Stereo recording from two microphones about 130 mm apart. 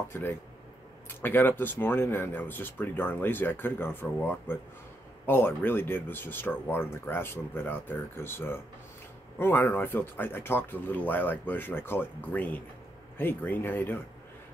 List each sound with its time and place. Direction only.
0.1 s speech: 15° left (ahead or behind)